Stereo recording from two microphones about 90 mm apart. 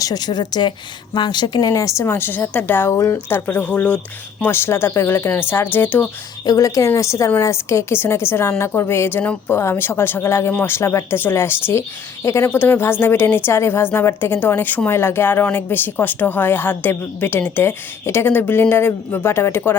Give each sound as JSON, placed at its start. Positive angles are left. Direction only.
{"t": 0.0, "sound": "a woman's voice", "side_deg": 50}
{"t": 4.4, "sound": "speech", "side_deg": 25}
{"t": 6.4, "sound": "speech", "side_deg": 45}